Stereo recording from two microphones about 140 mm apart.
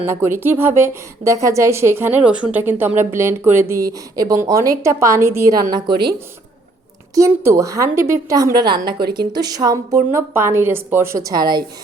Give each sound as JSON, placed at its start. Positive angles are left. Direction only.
{"t": 0.0, "sound": "a woman's voice", "side_deg": -20}
{"t": 7.2, "sound": "a woman's voice", "side_deg": -20}